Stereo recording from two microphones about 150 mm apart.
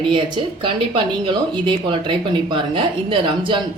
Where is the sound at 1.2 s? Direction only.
35° right (ahead or behind).